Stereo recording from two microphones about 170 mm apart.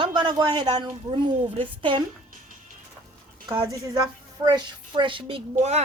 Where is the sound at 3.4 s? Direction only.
30° right (ahead or behind).